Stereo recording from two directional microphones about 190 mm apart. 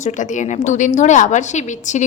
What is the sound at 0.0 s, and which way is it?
A woman's voice, 40° left (ahead or behind).